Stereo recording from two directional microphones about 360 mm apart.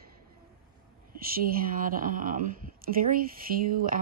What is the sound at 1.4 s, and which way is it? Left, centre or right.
A woman's voice, right.